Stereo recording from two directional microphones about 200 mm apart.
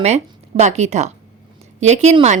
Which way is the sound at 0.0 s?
35° right (ahead or behind).